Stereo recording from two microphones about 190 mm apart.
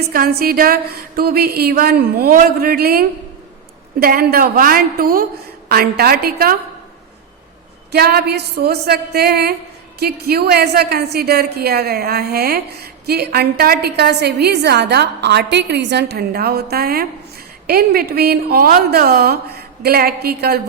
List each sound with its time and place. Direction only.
0.1 s speech: 50° right (ahead or behind)
7.9 s a woman's voice: 55° right (ahead or behind)